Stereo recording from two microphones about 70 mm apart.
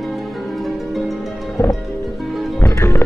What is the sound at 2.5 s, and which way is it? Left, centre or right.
Music, left.